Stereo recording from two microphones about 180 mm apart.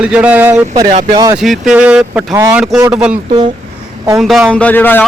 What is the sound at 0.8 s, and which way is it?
Speech, 40° right (ahead or behind).